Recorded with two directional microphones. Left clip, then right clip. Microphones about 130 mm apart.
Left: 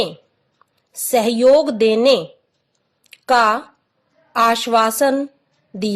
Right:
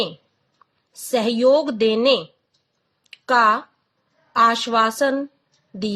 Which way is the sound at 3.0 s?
40° left (ahead or behind).